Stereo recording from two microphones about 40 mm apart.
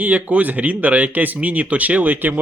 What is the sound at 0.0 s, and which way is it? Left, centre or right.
Speech, right.